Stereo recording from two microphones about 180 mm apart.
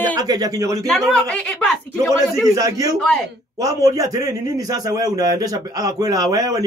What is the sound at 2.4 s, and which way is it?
A man's voice, 20° right (ahead or behind).